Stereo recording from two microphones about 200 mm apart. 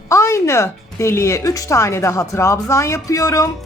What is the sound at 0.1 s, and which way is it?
A woman's voice, 15° left (ahead or behind).